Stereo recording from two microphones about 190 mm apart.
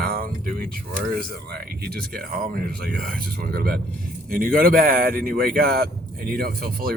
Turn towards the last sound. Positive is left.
turn(degrees=-50)  # may be behind; listen again after turning